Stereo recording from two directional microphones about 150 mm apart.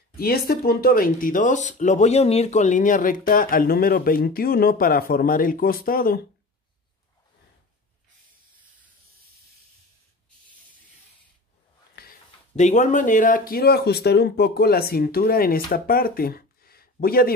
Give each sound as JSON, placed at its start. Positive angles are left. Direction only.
{"t": 0.2, "sound": "speech", "side_deg": 90}
{"t": 11.9, "sound": "a sound", "side_deg": 90}
{"t": 12.5, "sound": "speech", "side_deg": 50}